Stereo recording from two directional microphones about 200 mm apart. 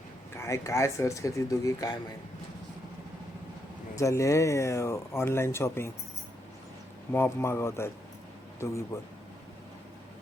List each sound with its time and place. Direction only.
0.3 s speech: 15° left (ahead or behind)
3.9 s speech: 15° left (ahead or behind)
7.1 s speech: 10° left (ahead or behind)